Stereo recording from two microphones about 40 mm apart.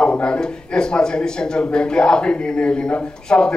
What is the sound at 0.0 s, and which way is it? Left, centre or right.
A man's voice, left.